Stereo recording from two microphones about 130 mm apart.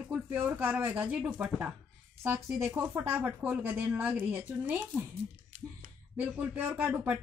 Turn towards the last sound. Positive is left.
turn(degrees=-15)  # may be behind; listen again after turning